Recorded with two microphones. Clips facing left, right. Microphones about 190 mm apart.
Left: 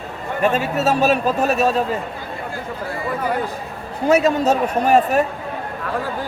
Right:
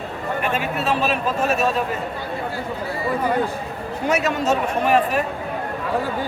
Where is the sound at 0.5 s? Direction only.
40° left (ahead or behind).